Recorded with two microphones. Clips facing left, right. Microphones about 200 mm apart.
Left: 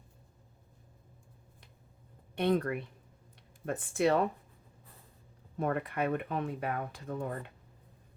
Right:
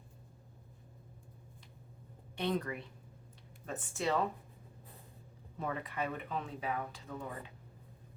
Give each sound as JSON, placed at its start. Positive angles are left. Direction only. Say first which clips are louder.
{"t": 2.3, "sound": "speech", "louder": "left 6 dB", "side_deg": 60}
{"t": 5.5, "sound": "speech", "louder": "left 6 dB", "side_deg": 55}